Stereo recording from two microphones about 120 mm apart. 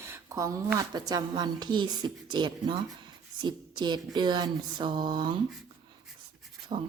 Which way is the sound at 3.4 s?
40° right (ahead or behind).